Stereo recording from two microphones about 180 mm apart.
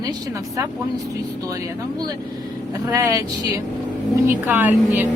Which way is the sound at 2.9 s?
20° right (ahead or behind).